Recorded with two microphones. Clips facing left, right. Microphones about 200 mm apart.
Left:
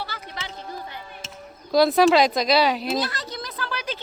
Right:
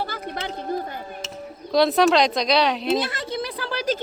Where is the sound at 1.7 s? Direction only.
Centre (ahead or behind).